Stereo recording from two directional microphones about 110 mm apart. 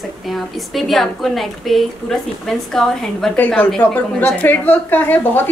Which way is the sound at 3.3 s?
15° left (ahead or behind).